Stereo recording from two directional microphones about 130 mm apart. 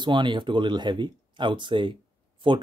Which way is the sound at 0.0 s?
35° right (ahead or behind).